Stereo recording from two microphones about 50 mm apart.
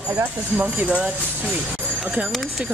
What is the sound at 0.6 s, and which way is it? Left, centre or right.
Speech, right.